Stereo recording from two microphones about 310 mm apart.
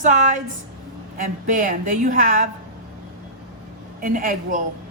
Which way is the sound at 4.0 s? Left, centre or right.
Right.